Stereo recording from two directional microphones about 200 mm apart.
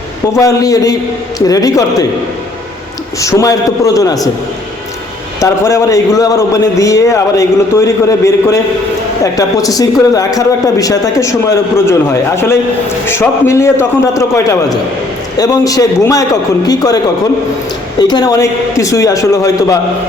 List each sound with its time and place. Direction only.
0.3 s a man's voice: 15° left (ahead or behind)
3.2 s a man's voice: 15° left (ahead or behind)
5.4 s a man's voice: 15° left (ahead or behind)
13.1 s a man's voice: 10° left (ahead or behind)
18.1 s a man's voice: 20° left (ahead or behind)